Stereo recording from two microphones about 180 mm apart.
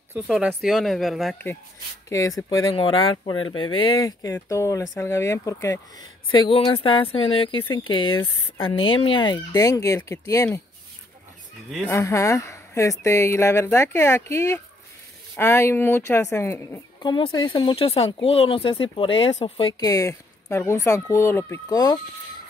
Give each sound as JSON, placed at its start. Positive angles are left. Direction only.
{"t": 0.3, "sound": "speech", "side_deg": 0}
{"t": 2.0, "sound": "a woman's voice", "side_deg": 20}
{"t": 11.9, "sound": "a woman's voice", "side_deg": 15}